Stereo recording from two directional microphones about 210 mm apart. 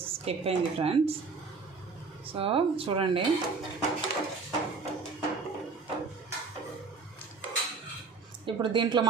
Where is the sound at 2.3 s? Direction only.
25° right (ahead or behind).